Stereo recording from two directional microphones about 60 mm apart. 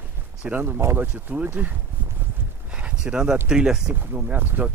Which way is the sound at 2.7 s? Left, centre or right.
Centre.